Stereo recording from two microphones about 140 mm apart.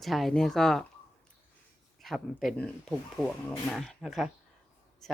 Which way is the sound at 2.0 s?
Centre (ahead or behind).